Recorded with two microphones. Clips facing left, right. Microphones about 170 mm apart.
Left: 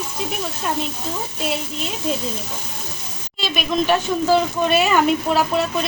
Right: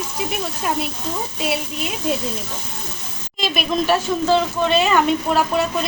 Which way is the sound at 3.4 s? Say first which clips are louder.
Right 2 dB; 40° right (ahead or behind).